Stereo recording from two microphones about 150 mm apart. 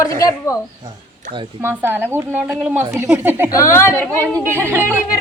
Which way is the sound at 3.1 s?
15° right (ahead or behind).